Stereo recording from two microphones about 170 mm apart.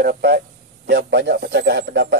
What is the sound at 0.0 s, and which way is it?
Speech, 60° right (ahead or behind).